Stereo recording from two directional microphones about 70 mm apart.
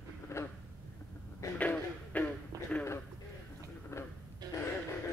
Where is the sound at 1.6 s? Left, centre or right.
Left.